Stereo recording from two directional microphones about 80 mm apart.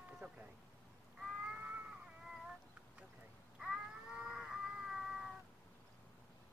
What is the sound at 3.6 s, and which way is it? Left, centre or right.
Cat, centre.